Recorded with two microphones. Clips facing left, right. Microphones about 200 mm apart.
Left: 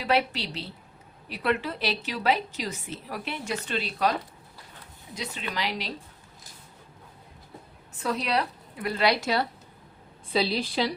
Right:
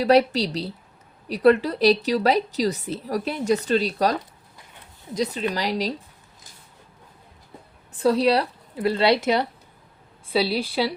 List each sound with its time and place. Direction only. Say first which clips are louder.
0.0 s a woman's voice: right 9 dB; 40° right (ahead or behind)
8.0 s a woman's voice: right 9 dB; 35° right (ahead or behind)
10.3 s a woman's voice: right 3 dB; 10° right (ahead or behind)